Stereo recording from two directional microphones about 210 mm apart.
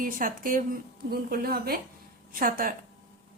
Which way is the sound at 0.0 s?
40° right (ahead or behind).